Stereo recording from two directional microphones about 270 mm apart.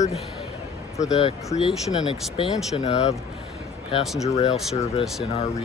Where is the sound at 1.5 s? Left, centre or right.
Left.